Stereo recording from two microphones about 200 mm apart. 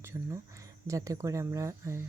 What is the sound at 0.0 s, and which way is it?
Speech, 15° right (ahead or behind).